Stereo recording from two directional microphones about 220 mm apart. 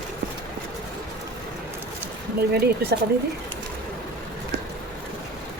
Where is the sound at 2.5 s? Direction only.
45° right (ahead or behind).